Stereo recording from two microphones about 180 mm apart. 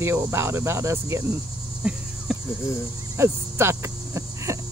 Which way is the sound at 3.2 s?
15° right (ahead or behind).